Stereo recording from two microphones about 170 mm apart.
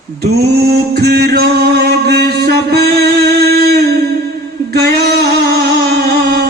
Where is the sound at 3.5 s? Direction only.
70° right (ahead or behind).